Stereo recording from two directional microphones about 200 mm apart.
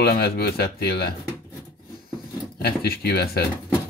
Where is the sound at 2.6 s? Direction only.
50° left (ahead or behind).